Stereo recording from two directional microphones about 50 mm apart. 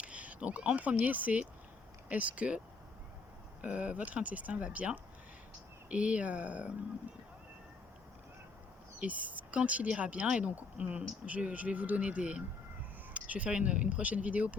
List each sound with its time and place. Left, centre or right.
0.0 s speech: right
3.6 s speech: right
9.0 s speech: right